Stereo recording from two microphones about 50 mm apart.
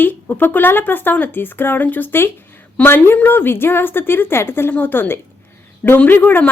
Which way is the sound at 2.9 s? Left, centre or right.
Left.